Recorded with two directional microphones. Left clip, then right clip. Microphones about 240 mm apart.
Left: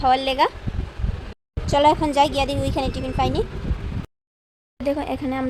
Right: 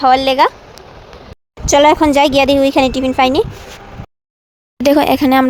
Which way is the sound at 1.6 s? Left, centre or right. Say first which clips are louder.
Right 8 dB; right.